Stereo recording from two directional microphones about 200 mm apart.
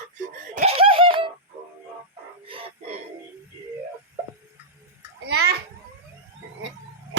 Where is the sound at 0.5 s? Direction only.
30° right (ahead or behind).